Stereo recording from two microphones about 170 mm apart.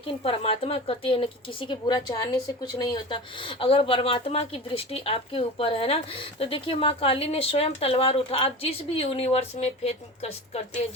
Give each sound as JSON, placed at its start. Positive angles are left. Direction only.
{"t": 0.3, "sound": "speech", "side_deg": 35}